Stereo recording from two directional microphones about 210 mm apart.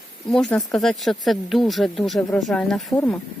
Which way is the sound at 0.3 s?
Centre (ahead or behind).